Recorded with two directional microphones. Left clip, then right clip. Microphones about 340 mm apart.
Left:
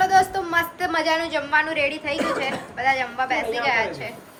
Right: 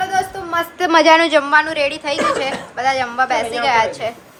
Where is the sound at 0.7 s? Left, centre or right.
Centre.